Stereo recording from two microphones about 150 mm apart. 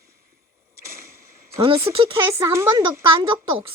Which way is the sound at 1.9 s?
20° right (ahead or behind).